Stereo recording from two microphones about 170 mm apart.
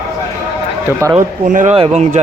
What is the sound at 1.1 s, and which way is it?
Speech, 45° right (ahead or behind).